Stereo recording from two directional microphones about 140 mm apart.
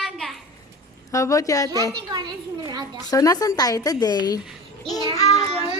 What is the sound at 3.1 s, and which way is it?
A woman's voice, 25° left (ahead or behind).